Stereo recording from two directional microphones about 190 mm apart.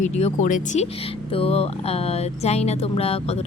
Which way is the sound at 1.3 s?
30° left (ahead or behind).